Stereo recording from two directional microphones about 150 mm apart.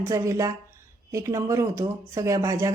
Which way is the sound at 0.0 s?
20° right (ahead or behind).